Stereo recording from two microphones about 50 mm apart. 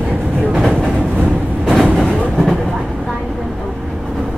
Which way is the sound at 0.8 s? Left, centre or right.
Centre.